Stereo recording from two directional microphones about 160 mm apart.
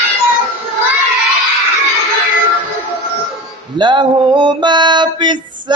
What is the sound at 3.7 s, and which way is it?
Mantra, 30° right (ahead or behind).